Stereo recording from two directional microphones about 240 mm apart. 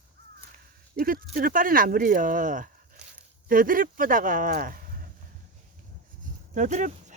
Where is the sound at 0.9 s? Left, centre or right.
Right.